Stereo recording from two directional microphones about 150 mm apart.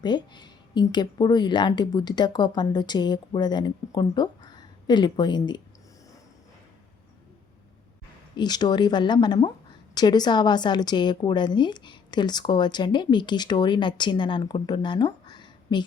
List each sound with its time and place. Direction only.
0.0 s a woman's voice: 30° left (ahead or behind)
8.4 s a woman's voice: 30° left (ahead or behind)